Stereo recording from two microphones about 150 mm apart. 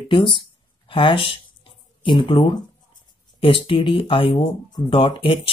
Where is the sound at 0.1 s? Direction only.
35° left (ahead or behind).